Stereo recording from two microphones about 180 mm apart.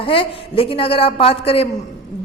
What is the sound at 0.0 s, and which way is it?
A woman's voice, 30° left (ahead or behind).